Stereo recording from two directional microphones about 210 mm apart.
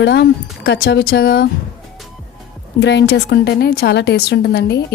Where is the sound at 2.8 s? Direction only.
55° left (ahead or behind).